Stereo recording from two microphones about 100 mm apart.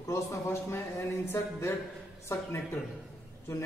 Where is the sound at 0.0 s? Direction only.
30° left (ahead or behind).